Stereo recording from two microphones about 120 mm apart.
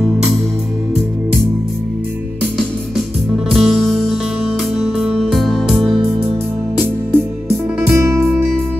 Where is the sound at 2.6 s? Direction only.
5° left (ahead or behind).